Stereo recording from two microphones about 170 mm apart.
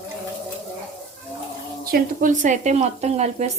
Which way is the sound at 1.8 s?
55° right (ahead or behind).